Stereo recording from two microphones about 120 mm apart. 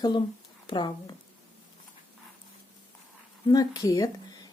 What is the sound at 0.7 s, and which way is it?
Speech, 35° left (ahead or behind).